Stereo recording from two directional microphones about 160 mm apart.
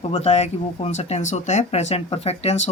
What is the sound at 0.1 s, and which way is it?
Speech, 40° left (ahead or behind).